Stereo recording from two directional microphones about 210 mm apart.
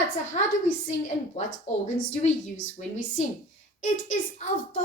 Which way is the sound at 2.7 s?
35° left (ahead or behind).